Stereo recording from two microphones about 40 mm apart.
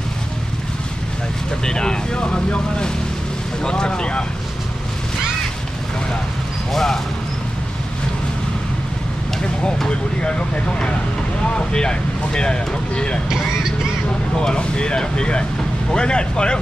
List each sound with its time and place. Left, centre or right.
1.7 s speech: centre
6.7 s speech: centre
9.8 s speech: left
14.3 s speech: left